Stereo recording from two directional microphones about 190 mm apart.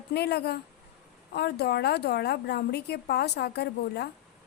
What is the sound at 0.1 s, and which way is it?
A woman's voice, 60° left (ahead or behind).